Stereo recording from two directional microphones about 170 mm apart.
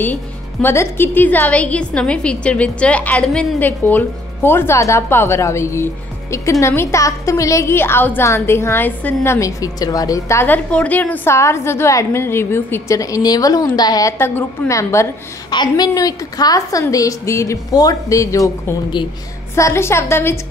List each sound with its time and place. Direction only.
0.0 s a woman's voice: 10° left (ahead or behind)